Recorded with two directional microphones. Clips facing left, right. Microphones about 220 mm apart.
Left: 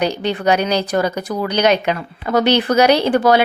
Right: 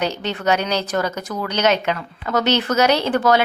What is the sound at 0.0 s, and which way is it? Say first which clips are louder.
Speech: left 4 dB; 15° left (ahead or behind).